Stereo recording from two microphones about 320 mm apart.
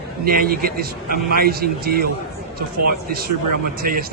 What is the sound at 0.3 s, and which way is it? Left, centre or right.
Speech, right.